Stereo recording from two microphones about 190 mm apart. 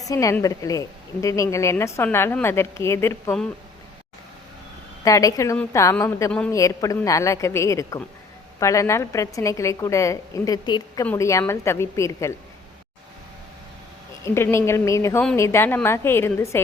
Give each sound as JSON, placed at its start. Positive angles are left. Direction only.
{"t": 0.0, "sound": "a woman's voice", "side_deg": 15}
{"t": 5.0, "sound": "a woman's voice", "side_deg": 15}
{"t": 14.3, "sound": "a woman's voice", "side_deg": 15}